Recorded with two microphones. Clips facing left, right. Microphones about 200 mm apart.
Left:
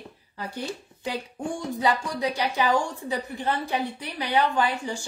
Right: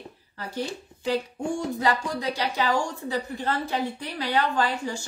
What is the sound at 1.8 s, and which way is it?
A woman's voice, 15° left (ahead or behind).